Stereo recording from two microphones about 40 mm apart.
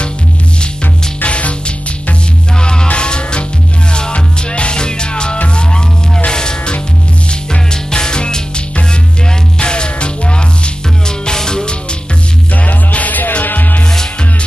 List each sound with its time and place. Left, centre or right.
1.2 s music: left
2.6 s music: left
12.6 s music: left